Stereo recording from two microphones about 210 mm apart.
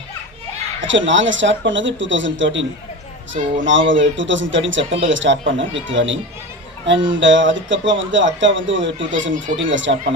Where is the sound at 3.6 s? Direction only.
65° right (ahead or behind).